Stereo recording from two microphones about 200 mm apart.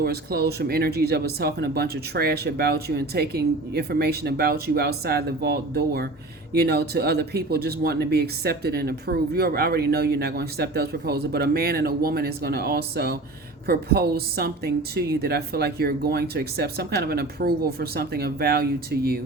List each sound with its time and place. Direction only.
0.0 s speech: 50° right (ahead or behind)